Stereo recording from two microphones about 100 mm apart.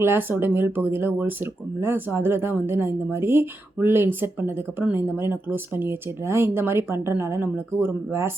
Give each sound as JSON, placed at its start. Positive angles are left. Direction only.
{"t": 0.0, "sound": "speech", "side_deg": -20}